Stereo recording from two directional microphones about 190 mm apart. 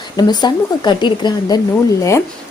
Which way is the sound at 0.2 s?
20° left (ahead or behind).